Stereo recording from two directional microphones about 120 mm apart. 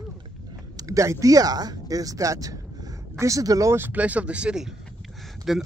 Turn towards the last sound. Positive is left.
turn(degrees=0)  # may be behind; listen again after turning